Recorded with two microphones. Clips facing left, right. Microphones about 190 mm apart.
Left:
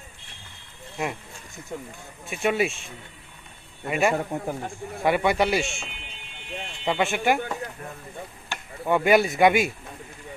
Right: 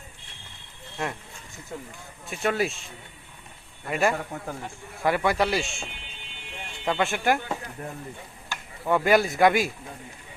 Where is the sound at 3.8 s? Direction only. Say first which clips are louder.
Left 1 dB; 5° left (ahead or behind).